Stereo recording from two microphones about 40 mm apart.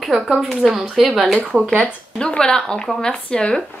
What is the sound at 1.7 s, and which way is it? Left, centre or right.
Speech, left.